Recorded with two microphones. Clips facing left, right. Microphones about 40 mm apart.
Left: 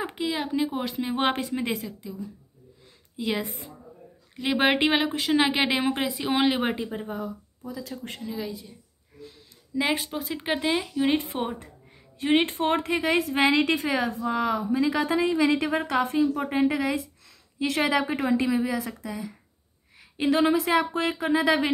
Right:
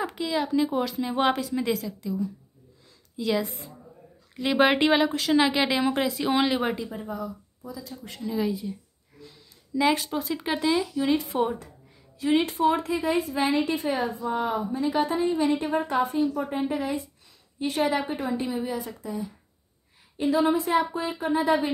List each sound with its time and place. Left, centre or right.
0.0 s speech: left
0.7 s speech: centre
0.9 s speech: left
3.2 s speech: left
3.4 s a woman's voice: left
4.4 s speech: centre
6.6 s speech: left
7.8 s speech: left
8.3 s a woman's voice: centre
9.8 s speech: centre
12.2 s a woman's voice: left
20.0 s a woman's voice: left